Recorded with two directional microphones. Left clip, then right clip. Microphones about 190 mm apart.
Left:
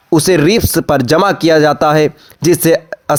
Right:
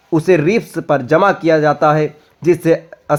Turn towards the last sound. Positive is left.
turn(degrees=35)  # may be behind; listen again after turning